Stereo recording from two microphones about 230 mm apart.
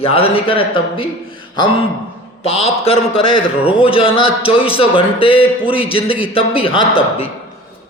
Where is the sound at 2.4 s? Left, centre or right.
Left.